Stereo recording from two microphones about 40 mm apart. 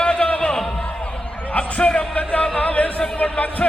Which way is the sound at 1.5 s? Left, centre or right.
Left.